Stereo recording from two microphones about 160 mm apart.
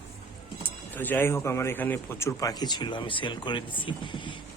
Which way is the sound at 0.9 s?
10° left (ahead or behind).